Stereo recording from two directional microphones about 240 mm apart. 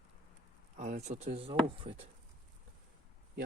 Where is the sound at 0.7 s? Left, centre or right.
Right.